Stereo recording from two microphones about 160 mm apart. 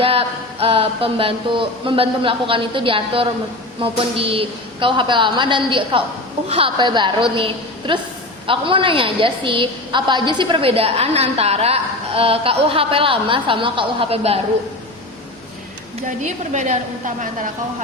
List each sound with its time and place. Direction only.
0.0 s a woman's voice: 35° right (ahead or behind)
16.0 s a woman's voice: 50° right (ahead or behind)